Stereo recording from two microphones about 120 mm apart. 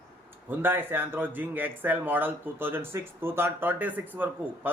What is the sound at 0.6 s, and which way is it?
A man's voice, 20° right (ahead or behind).